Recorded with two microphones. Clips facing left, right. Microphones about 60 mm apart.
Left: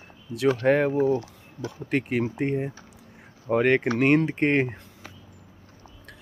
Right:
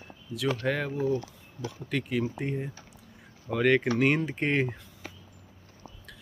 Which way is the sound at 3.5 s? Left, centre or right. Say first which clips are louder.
Left 3 dB; left.